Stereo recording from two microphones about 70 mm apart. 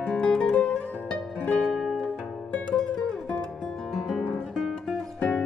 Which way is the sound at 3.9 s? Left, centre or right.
Centre.